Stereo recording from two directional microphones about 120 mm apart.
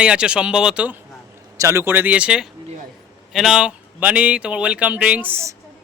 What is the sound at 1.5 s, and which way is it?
Speech, 25° right (ahead or behind).